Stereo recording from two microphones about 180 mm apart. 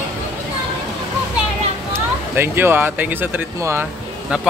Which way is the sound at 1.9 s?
15° right (ahead or behind).